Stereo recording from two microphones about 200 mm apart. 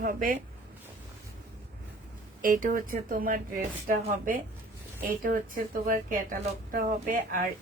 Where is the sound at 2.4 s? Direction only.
45° right (ahead or behind).